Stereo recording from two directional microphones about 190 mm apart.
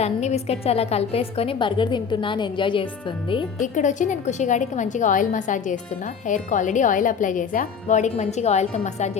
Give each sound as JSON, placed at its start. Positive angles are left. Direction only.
{"t": 0.0, "sound": "speech", "side_deg": 35}
{"t": 3.6, "sound": "speech", "side_deg": 40}